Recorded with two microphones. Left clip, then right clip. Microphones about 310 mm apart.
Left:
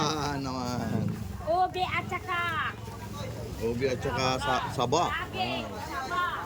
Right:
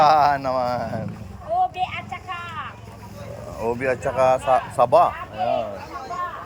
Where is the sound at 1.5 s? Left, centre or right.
Centre.